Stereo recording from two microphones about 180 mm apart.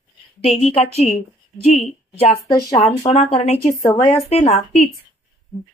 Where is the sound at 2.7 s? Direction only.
35° left (ahead or behind).